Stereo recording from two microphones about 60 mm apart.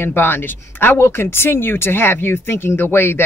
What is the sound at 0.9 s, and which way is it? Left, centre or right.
Speech, left.